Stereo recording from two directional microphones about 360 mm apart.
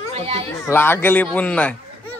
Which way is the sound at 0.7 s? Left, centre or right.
Centre.